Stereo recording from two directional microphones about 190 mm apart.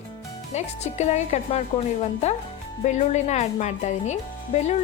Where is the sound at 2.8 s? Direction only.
40° left (ahead or behind).